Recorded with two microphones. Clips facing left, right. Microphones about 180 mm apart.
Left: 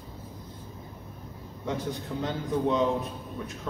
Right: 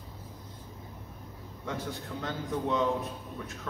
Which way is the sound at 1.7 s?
20° left (ahead or behind).